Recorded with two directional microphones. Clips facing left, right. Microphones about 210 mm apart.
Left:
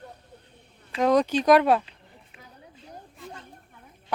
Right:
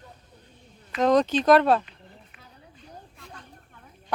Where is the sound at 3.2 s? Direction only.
Centre (ahead or behind).